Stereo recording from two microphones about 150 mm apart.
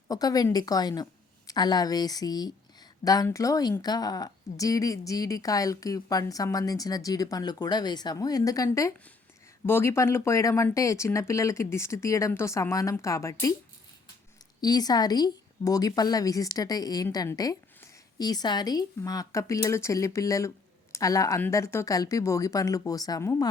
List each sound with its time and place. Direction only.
0.1 s a woman's voice: 25° left (ahead or behind)
14.6 s a woman's voice: 25° left (ahead or behind)